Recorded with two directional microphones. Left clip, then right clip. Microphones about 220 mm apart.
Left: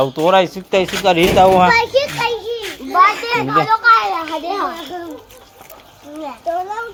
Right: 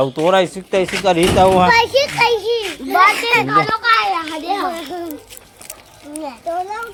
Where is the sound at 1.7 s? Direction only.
35° right (ahead or behind).